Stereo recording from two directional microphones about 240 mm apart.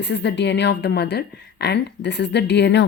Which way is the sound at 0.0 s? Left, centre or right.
Left.